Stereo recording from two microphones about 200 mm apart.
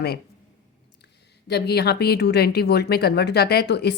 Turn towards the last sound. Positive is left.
turn(degrees=55)  # may be behind; listen again after turning